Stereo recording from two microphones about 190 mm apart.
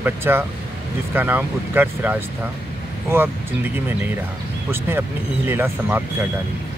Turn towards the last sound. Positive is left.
turn(degrees=-10)  # may be behind; listen again after turning